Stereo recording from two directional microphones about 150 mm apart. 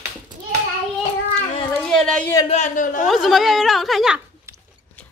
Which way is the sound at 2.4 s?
50° left (ahead or behind).